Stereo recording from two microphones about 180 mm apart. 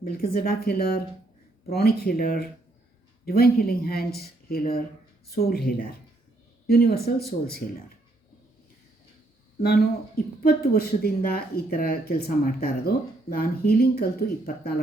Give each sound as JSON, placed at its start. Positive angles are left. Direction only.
{"t": 0.0, "sound": "speech", "side_deg": 55}
{"t": 9.6, "sound": "speech", "side_deg": 60}